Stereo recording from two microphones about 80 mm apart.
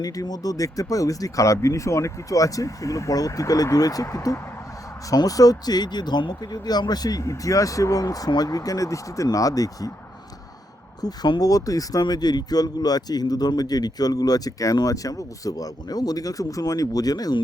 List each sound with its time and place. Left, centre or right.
0.0 s speech: left
11.0 s speech: left